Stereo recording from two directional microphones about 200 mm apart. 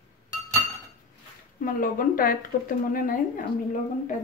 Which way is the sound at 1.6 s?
40° left (ahead or behind).